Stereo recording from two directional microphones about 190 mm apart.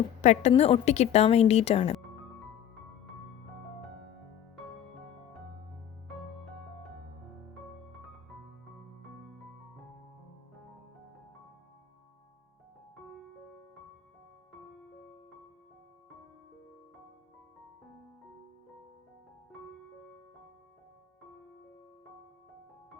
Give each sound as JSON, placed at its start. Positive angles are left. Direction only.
{"t": 0.2, "sound": "a woman's voice", "side_deg": 35}